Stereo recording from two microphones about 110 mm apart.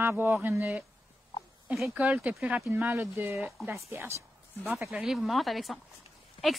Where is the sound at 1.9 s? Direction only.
15° right (ahead or behind).